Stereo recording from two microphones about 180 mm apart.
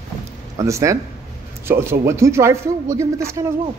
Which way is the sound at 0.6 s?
15° right (ahead or behind).